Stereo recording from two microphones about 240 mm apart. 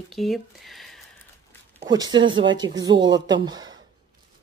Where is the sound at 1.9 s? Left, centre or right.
Centre.